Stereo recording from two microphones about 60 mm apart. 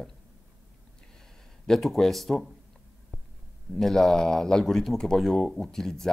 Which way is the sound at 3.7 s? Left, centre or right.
Centre.